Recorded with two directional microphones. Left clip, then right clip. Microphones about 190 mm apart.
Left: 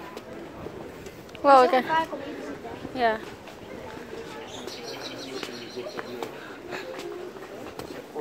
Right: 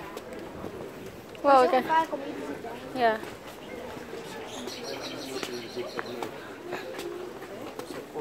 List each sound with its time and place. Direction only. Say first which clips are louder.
1.4 s speech: left 3 dB; 15° left (ahead or behind)
3.0 s speech: left 1 dB; 5° left (ahead or behind)